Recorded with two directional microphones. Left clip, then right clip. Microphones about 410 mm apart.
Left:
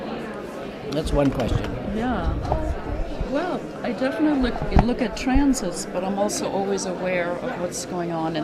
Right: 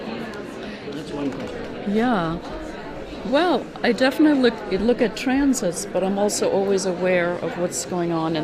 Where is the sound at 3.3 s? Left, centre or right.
Right.